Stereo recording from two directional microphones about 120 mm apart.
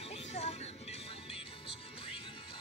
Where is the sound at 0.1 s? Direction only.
60° left (ahead or behind).